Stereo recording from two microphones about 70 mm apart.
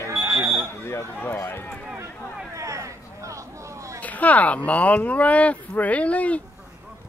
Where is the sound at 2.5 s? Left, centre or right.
Right.